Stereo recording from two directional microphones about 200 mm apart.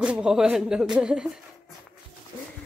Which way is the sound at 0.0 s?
5° right (ahead or behind).